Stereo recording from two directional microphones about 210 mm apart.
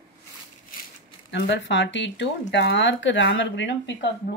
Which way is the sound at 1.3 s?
55° left (ahead or behind).